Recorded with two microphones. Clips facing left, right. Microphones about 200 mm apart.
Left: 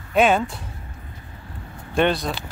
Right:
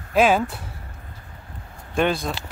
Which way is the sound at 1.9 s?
Centre (ahead or behind).